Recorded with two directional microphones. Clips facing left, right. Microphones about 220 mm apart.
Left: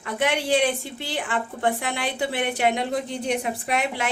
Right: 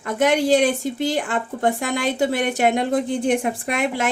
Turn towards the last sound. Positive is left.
turn(degrees=-45)  # may be behind; listen again after turning